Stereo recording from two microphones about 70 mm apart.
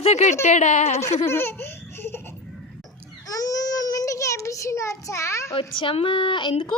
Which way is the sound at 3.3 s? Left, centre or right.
Left.